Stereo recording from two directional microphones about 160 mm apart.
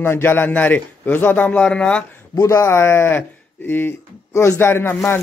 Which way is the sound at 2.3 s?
20° left (ahead or behind).